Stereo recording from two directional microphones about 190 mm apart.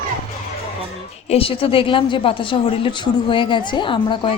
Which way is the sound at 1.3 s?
30° left (ahead or behind).